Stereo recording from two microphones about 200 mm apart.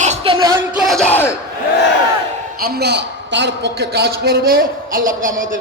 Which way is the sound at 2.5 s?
50° right (ahead or behind).